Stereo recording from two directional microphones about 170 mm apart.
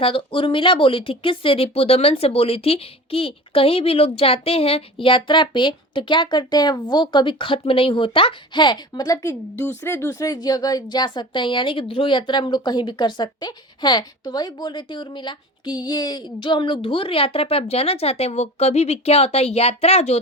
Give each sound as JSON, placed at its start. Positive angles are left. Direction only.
{"t": 0.0, "sound": "speech", "side_deg": 30}